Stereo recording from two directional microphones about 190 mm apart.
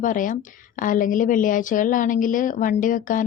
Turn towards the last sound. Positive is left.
turn(degrees=45)  # may be behind; listen again after turning